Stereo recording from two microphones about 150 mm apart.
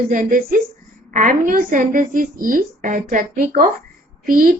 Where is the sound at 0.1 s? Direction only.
60° right (ahead or behind).